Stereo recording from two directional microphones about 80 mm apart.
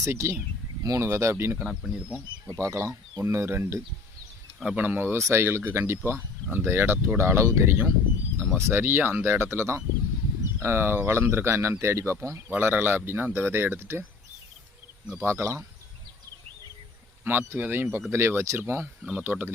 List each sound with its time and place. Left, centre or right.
0.0 s speech: right
1.6 s speech: centre
2.6 s speech: right
4.6 s speech: centre; by 12.4 s right
12.5 s speech: right
15.2 s speech: right
17.2 s speech: right